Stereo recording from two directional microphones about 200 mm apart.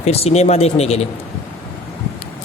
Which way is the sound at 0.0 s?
30° left (ahead or behind).